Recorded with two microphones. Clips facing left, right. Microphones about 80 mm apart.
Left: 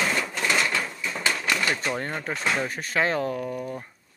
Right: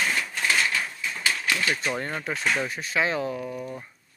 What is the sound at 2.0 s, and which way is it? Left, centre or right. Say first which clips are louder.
Speech: even; left.